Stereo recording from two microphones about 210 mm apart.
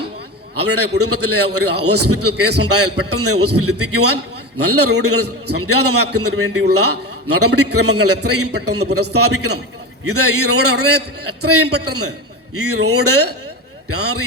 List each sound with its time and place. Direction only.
0.6 s a man's voice: 90° right